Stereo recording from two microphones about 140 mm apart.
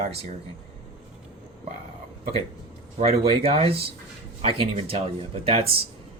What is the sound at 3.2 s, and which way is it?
Speech, 45° right (ahead or behind).